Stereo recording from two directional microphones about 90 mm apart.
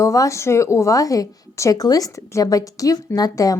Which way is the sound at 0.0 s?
35° left (ahead or behind).